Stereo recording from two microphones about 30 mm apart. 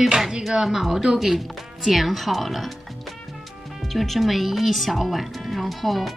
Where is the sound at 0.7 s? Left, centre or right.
Centre.